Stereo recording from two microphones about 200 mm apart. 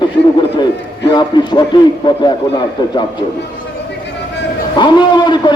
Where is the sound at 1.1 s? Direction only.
20° left (ahead or behind).